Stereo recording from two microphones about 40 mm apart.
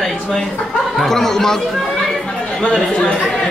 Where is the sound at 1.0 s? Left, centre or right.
Centre.